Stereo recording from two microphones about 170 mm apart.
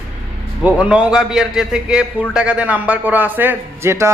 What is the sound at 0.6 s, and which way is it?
A man's voice, 5° right (ahead or behind).